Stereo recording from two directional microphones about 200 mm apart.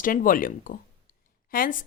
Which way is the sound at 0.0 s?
45° left (ahead or behind).